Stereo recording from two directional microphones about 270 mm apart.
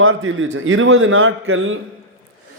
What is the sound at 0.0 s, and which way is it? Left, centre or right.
A man's voice, right.